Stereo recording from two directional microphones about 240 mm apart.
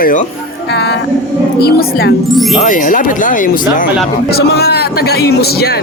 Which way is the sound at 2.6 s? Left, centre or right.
Left.